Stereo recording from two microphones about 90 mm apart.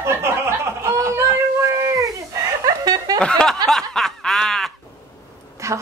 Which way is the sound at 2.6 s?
45° right (ahead or behind).